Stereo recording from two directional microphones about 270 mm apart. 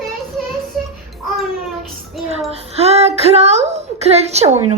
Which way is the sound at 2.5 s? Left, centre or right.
Right.